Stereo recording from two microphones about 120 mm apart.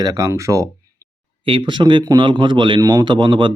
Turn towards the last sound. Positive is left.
turn(degrees=-40)  # may be behind; listen again after turning